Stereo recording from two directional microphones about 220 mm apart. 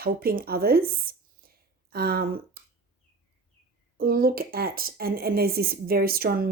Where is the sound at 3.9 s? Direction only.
45° right (ahead or behind).